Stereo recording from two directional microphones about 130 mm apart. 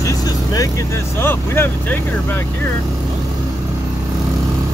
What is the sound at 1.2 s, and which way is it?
Speech, 15° left (ahead or behind).